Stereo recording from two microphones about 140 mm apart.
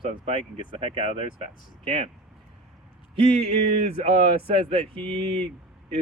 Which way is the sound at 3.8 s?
45° right (ahead or behind).